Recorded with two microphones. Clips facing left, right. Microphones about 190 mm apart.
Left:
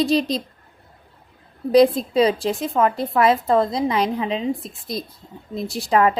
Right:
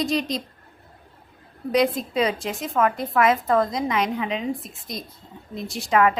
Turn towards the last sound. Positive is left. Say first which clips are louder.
# left 2 dB
turn(degrees=35)  # may be behind; listen again after turning